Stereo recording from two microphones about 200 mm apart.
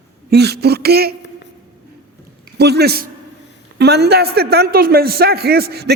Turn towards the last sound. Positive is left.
turn(degrees=-55)  # may be behind; listen again after turning